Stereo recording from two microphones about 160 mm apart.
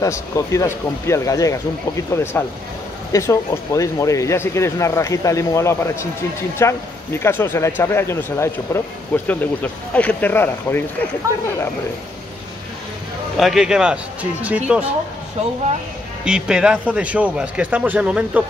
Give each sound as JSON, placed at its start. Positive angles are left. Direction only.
{"t": 0.0, "sound": "speech", "side_deg": 20}
{"t": 13.4, "sound": "a man's voice", "side_deg": 0}
{"t": 16.3, "sound": "a man's voice", "side_deg": -5}